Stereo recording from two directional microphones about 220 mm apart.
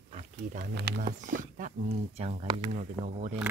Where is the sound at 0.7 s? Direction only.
45° right (ahead or behind).